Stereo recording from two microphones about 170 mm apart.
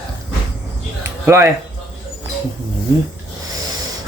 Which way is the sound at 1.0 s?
15° right (ahead or behind).